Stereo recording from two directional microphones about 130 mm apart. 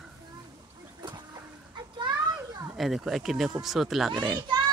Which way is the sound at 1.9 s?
35° right (ahead or behind).